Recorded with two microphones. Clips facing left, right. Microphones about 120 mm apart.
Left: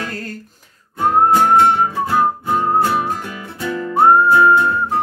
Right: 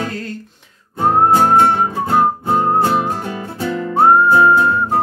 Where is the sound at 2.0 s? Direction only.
30° right (ahead or behind).